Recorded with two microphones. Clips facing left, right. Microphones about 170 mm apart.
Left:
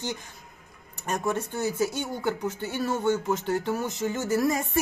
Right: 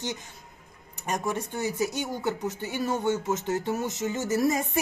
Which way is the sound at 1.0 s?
15° right (ahead or behind).